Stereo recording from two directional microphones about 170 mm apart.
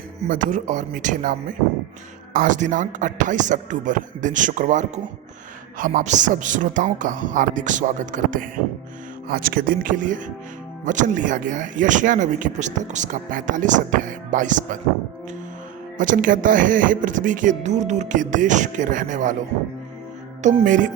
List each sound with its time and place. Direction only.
0.2 s speech: 50° right (ahead or behind)
16.0 s speech: 50° right (ahead or behind)